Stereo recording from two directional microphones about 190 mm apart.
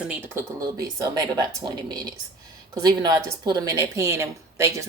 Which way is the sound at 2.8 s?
20° right (ahead or behind).